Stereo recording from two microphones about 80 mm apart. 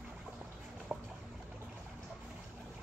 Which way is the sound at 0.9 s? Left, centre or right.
Centre.